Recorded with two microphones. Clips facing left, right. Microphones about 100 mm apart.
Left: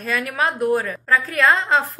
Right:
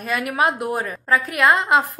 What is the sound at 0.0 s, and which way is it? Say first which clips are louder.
A woman's voice: right 2 dB; 15° right (ahead or behind).